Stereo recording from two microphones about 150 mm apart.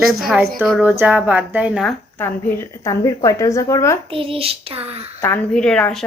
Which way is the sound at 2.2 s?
20° left (ahead or behind).